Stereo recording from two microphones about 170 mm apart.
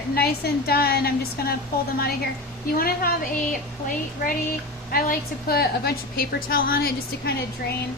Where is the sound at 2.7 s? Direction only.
60° left (ahead or behind).